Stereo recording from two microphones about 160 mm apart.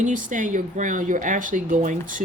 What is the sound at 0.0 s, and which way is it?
Speech, 55° right (ahead or behind).